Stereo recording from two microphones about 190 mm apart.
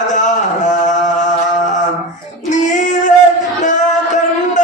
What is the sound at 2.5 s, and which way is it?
Child singing, 40° left (ahead or behind).